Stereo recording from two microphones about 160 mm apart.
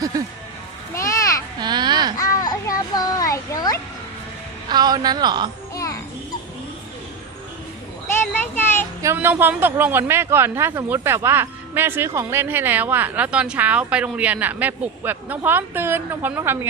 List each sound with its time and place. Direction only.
0.9 s a sound: 20° left (ahead or behind)
1.5 s babbling: 25° right (ahead or behind)
2.1 s a sound: 25° left (ahead or behind)
4.7 s a man's voice: 25° right (ahead or behind)
5.7 s music: 20° left (ahead or behind)
8.3 s child singing: 15° left (ahead or behind)
9.0 s speech: 15° right (ahead or behind)